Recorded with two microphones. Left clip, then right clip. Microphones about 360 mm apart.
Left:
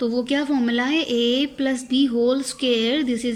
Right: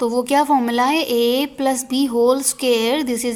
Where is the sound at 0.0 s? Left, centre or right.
Centre.